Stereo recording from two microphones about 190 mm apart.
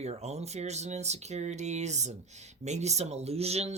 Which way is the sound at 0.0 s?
35° right (ahead or behind).